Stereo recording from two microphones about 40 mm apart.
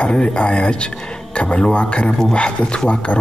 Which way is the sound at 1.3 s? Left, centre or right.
Left.